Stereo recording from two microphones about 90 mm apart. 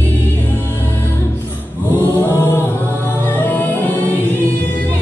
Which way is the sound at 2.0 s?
25° left (ahead or behind).